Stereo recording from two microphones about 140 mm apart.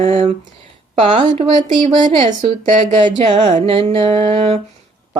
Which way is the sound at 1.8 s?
45° right (ahead or behind).